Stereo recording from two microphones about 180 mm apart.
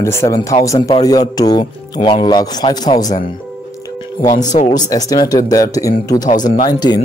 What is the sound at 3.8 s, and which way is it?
Music, 20° left (ahead or behind).